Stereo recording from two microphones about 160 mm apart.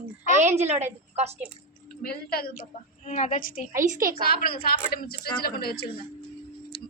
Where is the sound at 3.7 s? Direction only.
55° right (ahead or behind).